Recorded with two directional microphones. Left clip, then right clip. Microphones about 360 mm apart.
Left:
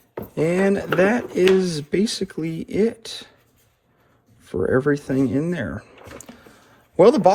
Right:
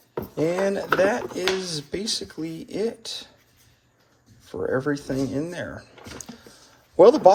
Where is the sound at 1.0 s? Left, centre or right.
Centre.